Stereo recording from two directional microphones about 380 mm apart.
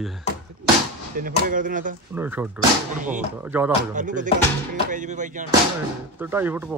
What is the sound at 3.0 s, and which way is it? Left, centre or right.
Speech, centre.